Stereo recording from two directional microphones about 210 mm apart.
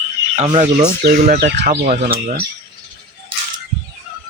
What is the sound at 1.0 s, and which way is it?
Speech, 45° right (ahead or behind).